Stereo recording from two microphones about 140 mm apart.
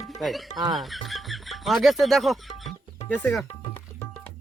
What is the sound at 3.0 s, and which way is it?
Speech, 10° left (ahead or behind).